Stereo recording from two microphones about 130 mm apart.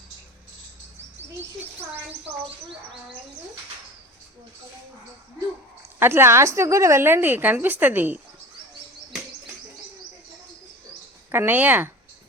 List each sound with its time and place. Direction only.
1.4 s a woman's voice: 20° right (ahead or behind)
6.0 s a woman's voice: 20° right (ahead or behind)
11.3 s a woman's voice: 15° right (ahead or behind)